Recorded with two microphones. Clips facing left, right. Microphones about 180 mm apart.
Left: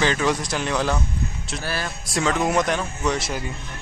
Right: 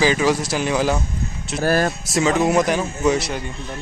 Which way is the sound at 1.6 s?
45° right (ahead or behind).